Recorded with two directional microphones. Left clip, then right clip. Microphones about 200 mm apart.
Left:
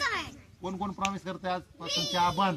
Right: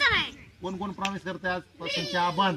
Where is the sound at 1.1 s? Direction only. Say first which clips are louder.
Right 3 dB; 25° left (ahead or behind).